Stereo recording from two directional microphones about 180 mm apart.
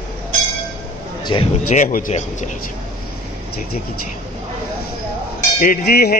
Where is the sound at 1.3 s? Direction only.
25° left (ahead or behind).